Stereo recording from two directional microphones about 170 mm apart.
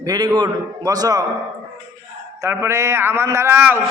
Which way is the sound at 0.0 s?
20° right (ahead or behind).